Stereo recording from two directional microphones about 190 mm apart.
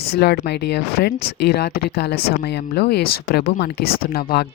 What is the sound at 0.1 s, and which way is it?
Speech, 60° left (ahead or behind).